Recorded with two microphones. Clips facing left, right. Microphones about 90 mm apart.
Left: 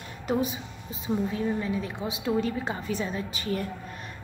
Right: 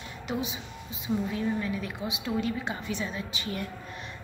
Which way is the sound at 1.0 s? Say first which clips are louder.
Left 2 dB; 30° left (ahead or behind).